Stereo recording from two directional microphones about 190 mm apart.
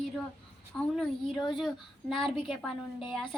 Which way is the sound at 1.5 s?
Centre (ahead or behind).